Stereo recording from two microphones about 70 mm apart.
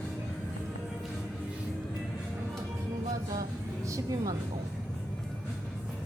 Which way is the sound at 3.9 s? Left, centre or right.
Right.